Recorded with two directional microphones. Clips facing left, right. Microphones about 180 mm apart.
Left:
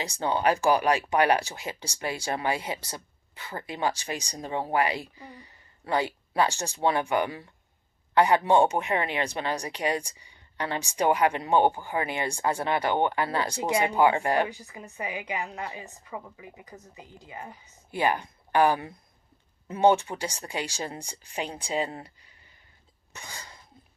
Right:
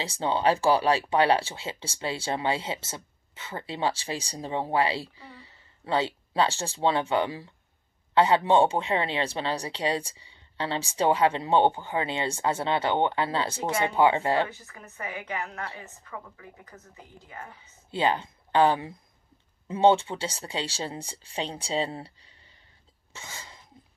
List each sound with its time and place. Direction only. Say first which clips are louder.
0.0 s speech: right 1 dB; 25° right (ahead or behind)
4.7 s a sound: even; 30° right (ahead or behind)
6.8 s speech: even; 25° right (ahead or behind)
8.5 s speech: even; 20° right (ahead or behind)
13.5 s a woman's voice: left 2 dB; 15° left (ahead or behind)
13.8 s speech: right 1 dB; 25° right (ahead or behind)
14.5 s a woman's voice: left 4 dB; 15° left (ahead or behind)
17.9 s speech: even; 25° right (ahead or behind)
23.1 s sneeze: even; 20° right (ahead or behind)